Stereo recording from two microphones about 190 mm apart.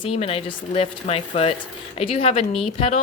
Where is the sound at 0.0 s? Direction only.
30° left (ahead or behind).